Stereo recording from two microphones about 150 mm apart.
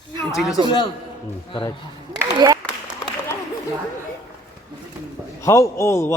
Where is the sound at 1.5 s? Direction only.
35° left (ahead or behind).